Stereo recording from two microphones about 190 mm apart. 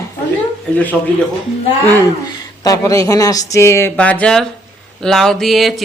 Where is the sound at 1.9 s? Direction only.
15° right (ahead or behind).